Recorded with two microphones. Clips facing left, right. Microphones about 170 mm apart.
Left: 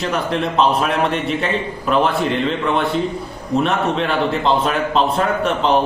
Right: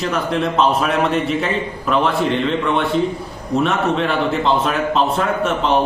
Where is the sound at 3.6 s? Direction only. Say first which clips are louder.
Right 1 dB; centre (ahead or behind).